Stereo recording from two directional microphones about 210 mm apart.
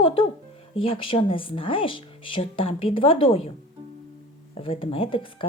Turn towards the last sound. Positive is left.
turn(degrees=25)  # may be behind; listen again after turning